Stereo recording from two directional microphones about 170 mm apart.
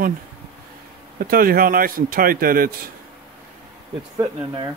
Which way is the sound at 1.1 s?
60° right (ahead or behind).